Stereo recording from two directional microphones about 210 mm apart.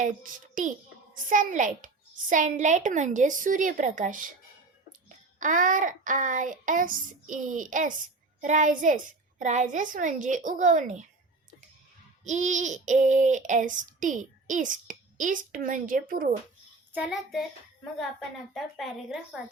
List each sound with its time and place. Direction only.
0.0 s child singing: 40° right (ahead or behind)
5.4 s child singing: 40° right (ahead or behind)
12.2 s child singing: 35° right (ahead or behind)
16.9 s a woman's voice: 5° right (ahead or behind)
18.5 s a woman's voice: centre (ahead or behind)